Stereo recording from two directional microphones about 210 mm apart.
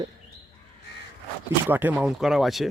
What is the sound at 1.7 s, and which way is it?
Speech, 10° right (ahead or behind).